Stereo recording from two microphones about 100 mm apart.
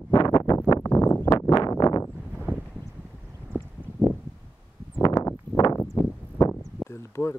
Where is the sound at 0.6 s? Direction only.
30° left (ahead or behind).